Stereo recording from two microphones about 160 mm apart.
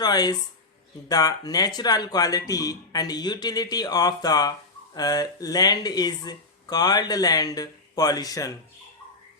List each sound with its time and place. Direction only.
0.0 s speech: 25° left (ahead or behind)